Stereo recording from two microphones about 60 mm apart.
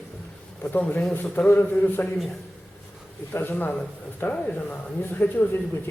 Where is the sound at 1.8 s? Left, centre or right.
Left.